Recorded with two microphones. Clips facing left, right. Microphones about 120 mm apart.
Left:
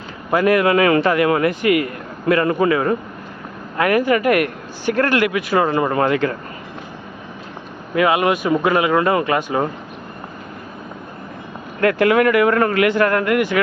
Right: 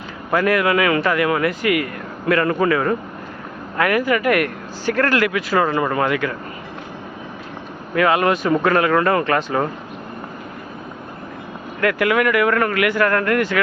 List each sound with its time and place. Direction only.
0.3 s speech: 20° left (ahead or behind)
7.9 s speech: 15° left (ahead or behind)
11.8 s speech: 30° left (ahead or behind)